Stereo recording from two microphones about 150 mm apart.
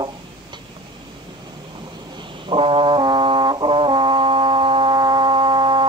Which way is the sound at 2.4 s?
35° right (ahead or behind).